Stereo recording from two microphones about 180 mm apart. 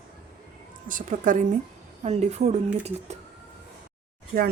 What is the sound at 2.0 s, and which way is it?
Speech, 35° right (ahead or behind).